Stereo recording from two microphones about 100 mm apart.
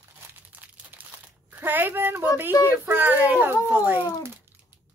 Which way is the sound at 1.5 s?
20° right (ahead or behind).